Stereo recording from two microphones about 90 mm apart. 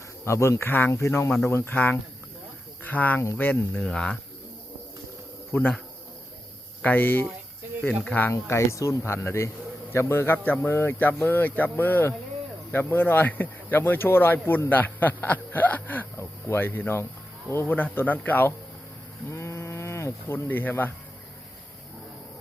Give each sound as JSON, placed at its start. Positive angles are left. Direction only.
{"t": 0.3, "sound": "speech", "side_deg": 30}
{"t": 5.5, "sound": "speech", "side_deg": 30}
{"t": 6.8, "sound": "speech", "side_deg": 20}
{"t": 8.3, "sound": "speech", "side_deg": 30}
{"t": 19.3, "sound": "livestock", "side_deg": 35}